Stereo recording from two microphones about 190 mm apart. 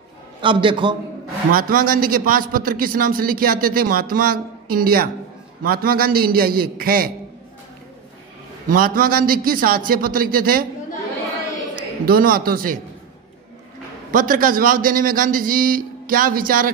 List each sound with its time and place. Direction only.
0.4 s a man's voice: 25° right (ahead or behind)
1.5 s a man's voice: 50° right (ahead or behind)
8.6 s a man's voice: 50° right (ahead or behind)
12.1 s a man's voice: 50° right (ahead or behind)
14.1 s a man's voice: 45° right (ahead or behind)